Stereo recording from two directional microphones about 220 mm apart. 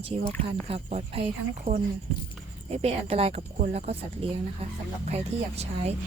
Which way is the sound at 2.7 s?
25° right (ahead or behind).